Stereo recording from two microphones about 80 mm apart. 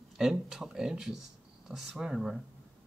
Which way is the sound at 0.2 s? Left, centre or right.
Centre.